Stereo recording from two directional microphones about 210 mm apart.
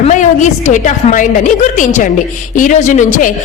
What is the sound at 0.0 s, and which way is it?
A woman's voice, 35° left (ahead or behind).